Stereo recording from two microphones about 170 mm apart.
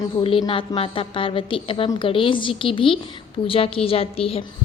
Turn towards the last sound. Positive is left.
turn(degrees=35)  # may be behind; listen again after turning